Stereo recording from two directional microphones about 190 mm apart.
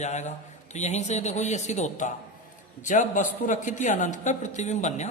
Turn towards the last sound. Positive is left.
turn(degrees=40)  # may be behind; listen again after turning